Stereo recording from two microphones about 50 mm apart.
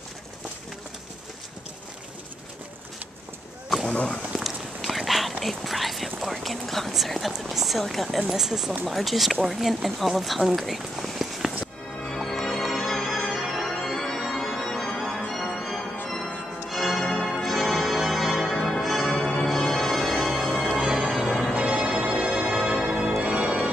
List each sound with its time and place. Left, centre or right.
3.9 s speech: left
4.4 s speech: centre
8.3 s speech: centre
12.0 s organ: centre
13.3 s music: centre
13.8 s organ: centre
15.0 s change ringing: centre
20.4 s change ringing: left
20.7 s change ringing: centre
21.6 s music: right
22.7 s change ringing: centre
23.2 s organ: right